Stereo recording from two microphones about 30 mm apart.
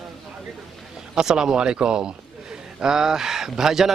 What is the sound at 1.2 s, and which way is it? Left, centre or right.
Speech, right.